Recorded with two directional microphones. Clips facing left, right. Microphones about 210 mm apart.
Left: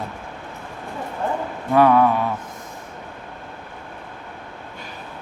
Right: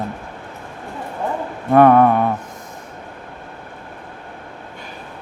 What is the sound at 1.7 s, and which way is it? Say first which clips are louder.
Mantra: right 4 dB; 50° right (ahead or behind).